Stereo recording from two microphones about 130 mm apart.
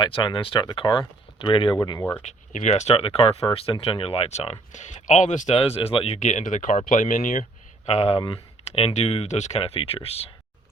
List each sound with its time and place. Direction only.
0.0 s speech: 40° left (ahead or behind)
1.8 s speech: 25° left (ahead or behind)
2.2 s speech: 70° left (ahead or behind)
5.5 s speech: 50° left (ahead or behind)
6.1 s speech: 70° left (ahead or behind); by 7.4 s 90° left
7.9 s speech: 55° left (ahead or behind)